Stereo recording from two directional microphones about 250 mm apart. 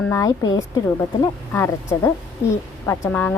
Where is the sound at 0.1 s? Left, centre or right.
Centre.